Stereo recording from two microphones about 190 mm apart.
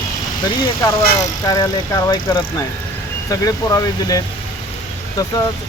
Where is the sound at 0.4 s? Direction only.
15° left (ahead or behind).